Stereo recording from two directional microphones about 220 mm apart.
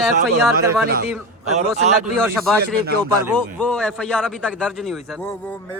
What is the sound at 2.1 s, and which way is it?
Speech, centre (ahead or behind).